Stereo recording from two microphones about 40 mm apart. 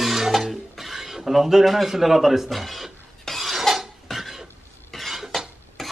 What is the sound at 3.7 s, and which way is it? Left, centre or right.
Dishes, centre.